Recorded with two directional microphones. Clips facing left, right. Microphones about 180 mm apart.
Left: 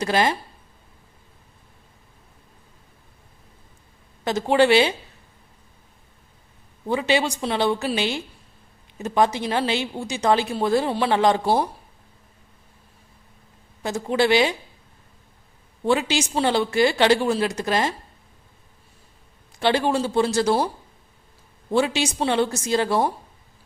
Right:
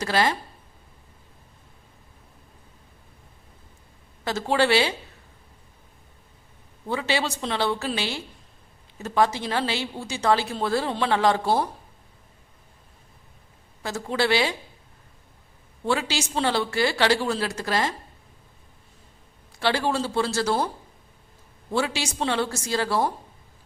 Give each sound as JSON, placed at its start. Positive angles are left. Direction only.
{"t": 0.0, "sound": "a woman's voice", "side_deg": 20}
{"t": 4.2, "sound": "a woman's voice", "side_deg": 20}
{"t": 6.8, "sound": "a woman's voice", "side_deg": 15}
{"t": 13.8, "sound": "a woman's voice", "side_deg": 20}
{"t": 15.8, "sound": "speech", "side_deg": 20}
{"t": 19.5, "sound": "a woman's voice", "side_deg": 20}
{"t": 21.7, "sound": "speech", "side_deg": 20}